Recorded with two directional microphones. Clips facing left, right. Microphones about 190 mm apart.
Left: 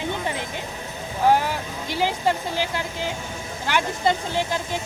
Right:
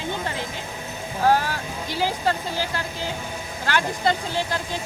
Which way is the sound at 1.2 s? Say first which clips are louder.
Left 1 dB; 20° left (ahead or behind).